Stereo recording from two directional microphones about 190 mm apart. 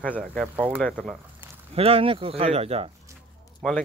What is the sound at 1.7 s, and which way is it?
Speech, 30° right (ahead or behind).